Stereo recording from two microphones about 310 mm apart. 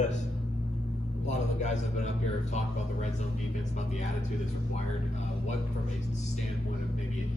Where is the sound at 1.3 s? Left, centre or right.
Left.